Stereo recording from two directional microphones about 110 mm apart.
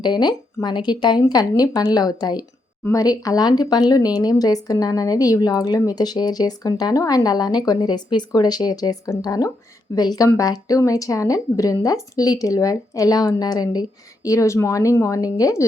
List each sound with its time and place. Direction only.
0.0 s a woman's voice: 40° left (ahead or behind)